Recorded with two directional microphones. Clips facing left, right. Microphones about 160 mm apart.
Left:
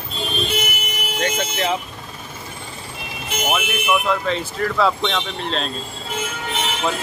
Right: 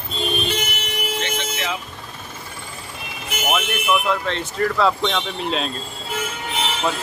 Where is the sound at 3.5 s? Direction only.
Centre (ahead or behind).